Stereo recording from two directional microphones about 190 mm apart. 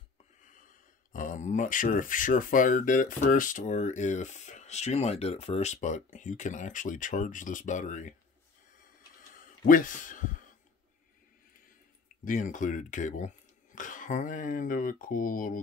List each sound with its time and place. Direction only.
0.4 s speech: 45° left (ahead or behind)
9.7 s speech: 45° left (ahead or behind)
12.3 s speech: 40° left (ahead or behind)